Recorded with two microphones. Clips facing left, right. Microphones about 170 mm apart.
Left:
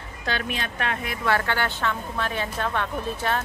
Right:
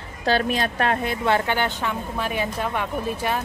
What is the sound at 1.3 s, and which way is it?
A woman's voice, 20° right (ahead or behind).